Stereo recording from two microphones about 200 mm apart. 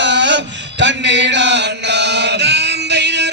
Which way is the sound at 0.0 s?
65° right (ahead or behind).